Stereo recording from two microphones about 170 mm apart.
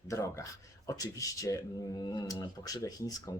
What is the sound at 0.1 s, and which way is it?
Speech, 20° left (ahead or behind).